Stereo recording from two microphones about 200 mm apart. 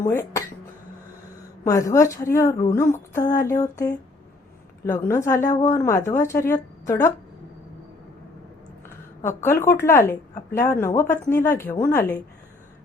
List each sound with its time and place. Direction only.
1.6 s a woman's voice: 15° left (ahead or behind)
9.2 s a woman's voice: 10° left (ahead or behind)